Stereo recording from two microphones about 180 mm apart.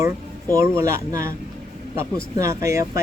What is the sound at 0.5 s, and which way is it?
Speech, 15° right (ahead or behind).